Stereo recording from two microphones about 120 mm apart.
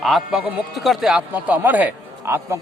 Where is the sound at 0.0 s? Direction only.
5° right (ahead or behind).